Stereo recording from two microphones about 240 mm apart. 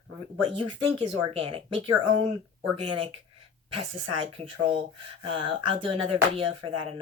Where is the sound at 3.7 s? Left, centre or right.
Right.